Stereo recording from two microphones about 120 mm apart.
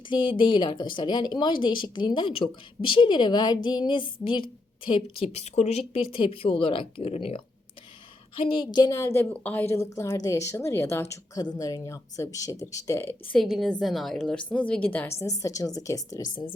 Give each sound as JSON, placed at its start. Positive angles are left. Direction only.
{"t": 0.1, "sound": "a woman's voice", "side_deg": 40}
{"t": 8.7, "sound": "a woman's voice", "side_deg": 35}
{"t": 9.0, "sound": "a woman's voice", "side_deg": 20}
{"t": 13.3, "sound": "a woman's voice", "side_deg": 0}
{"t": 15.2, "sound": "a woman's voice", "side_deg": 30}